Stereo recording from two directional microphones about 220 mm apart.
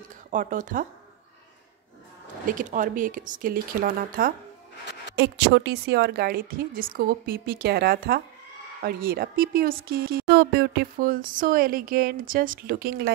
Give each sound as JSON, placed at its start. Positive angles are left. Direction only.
{"t": 0.3, "sound": "speech", "side_deg": -35}
{"t": 2.4, "sound": "speech", "side_deg": -35}
{"t": 5.1, "sound": "a woman's voice", "side_deg": -50}